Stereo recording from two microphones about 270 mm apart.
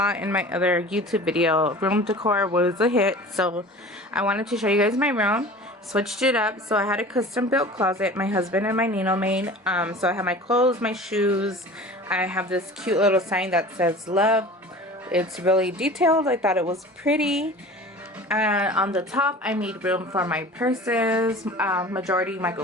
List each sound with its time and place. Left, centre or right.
0.0 s speech: centre
10.5 s speech: right
10.8 s speech: centre